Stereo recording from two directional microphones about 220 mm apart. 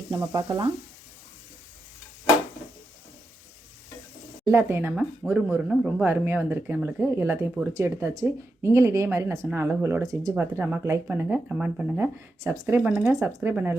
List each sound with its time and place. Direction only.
0.2 s speech: 15° right (ahead or behind)
4.4 s speech: 10° right (ahead or behind)